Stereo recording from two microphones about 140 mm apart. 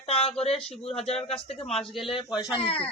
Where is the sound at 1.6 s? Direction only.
Centre (ahead or behind).